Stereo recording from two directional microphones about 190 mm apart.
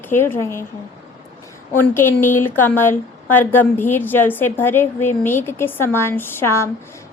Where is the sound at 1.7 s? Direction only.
10° left (ahead or behind).